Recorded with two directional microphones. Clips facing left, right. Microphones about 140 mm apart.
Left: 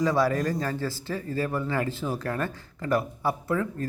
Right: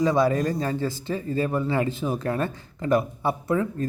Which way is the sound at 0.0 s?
20° right (ahead or behind).